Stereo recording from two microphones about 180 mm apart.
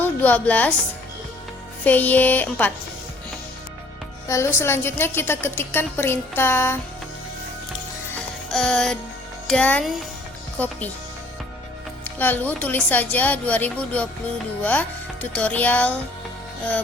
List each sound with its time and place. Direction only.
0.0 s a woman's voice: 10° left (ahead or behind)
1.8 s a woman's voice: 10° left (ahead or behind)
4.3 s a woman's voice: 15° left (ahead or behind)
8.4 s a child's voice: 5° left (ahead or behind)
12.0 s a woman's voice: 10° left (ahead or behind)